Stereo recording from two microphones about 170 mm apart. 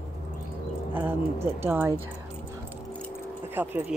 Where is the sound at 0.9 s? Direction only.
10° right (ahead or behind).